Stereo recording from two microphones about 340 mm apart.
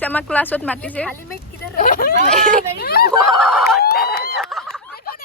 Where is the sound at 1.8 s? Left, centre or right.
Left.